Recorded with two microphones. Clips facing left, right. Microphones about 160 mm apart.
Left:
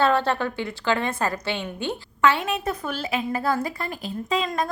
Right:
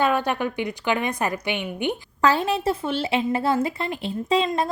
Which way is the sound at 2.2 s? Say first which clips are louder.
Right 2 dB; 35° right (ahead or behind).